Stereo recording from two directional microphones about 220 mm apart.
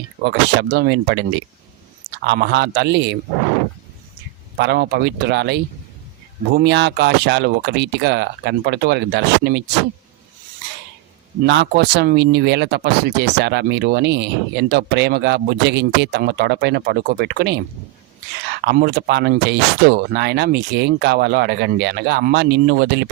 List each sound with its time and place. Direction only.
0.3 s speech: 50° right (ahead or behind)
2.2 s speech: 50° right (ahead or behind)
4.5 s speech: 50° right (ahead or behind)
11.4 s speech: 50° right (ahead or behind)
18.6 s speech: 45° right (ahead or behind)